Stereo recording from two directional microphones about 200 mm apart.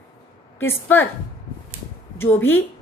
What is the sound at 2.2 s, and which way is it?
Speech, 10° left (ahead or behind).